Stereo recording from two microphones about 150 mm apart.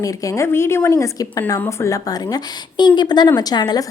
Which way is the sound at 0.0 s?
20° left (ahead or behind).